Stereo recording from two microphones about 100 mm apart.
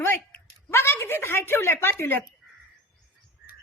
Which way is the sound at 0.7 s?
25° left (ahead or behind).